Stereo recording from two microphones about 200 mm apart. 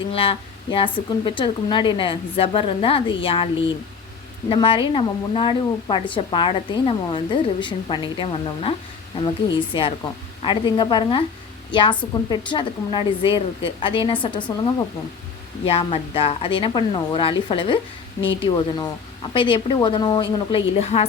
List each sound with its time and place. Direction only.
0.1 s a woman's voice: 30° left (ahead or behind)